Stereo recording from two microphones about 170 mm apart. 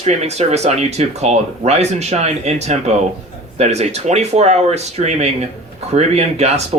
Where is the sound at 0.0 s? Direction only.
40° right (ahead or behind).